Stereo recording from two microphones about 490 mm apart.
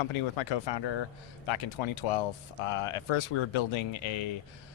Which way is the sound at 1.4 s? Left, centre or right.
Left.